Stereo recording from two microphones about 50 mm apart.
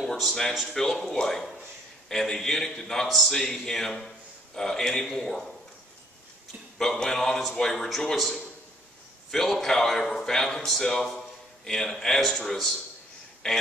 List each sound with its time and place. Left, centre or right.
0.0 s a man's voice: centre
6.8 s a man's voice: centre
13.4 s a man's voice: centre